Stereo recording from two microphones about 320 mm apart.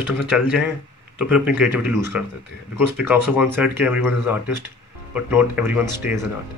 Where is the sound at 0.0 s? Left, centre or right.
Centre.